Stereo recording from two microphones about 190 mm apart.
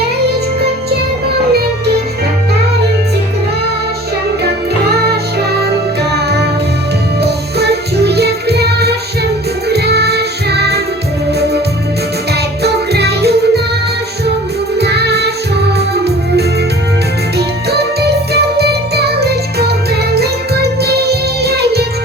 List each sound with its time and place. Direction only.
7.2 s music: 60° right (ahead or behind)
12.6 s music: 60° right (ahead or behind)
14.8 s music: 60° right (ahead or behind)